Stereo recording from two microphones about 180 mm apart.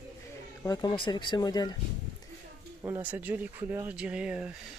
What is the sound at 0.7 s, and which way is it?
Speech, 25° left (ahead or behind).